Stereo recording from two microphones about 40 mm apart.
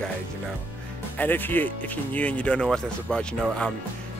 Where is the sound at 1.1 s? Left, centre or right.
Left.